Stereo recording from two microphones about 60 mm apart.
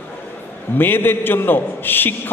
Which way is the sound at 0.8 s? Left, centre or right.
Left.